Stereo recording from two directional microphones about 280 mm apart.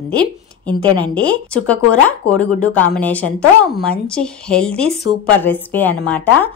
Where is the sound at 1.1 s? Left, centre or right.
Centre.